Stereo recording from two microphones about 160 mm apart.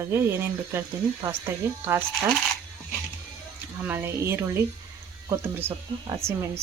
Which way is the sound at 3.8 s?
15° right (ahead or behind).